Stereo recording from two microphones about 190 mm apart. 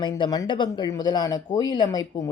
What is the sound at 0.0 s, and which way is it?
Speech, 20° left (ahead or behind).